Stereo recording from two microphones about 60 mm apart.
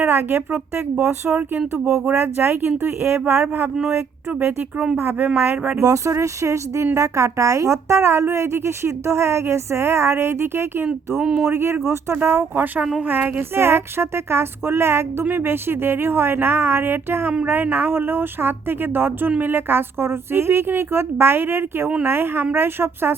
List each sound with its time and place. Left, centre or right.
0.0 s speech: right
5.7 s speech: right
13.1 s a sound: right
13.6 s speech: right